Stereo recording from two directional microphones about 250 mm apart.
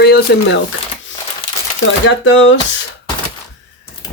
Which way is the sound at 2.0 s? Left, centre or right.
Left.